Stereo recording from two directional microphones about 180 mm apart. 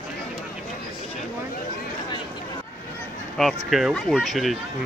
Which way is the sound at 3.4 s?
Centre (ahead or behind).